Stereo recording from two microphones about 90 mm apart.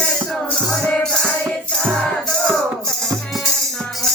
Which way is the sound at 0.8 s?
10° left (ahead or behind).